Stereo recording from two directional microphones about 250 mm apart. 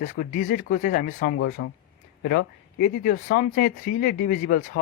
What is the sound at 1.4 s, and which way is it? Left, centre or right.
Speech, left.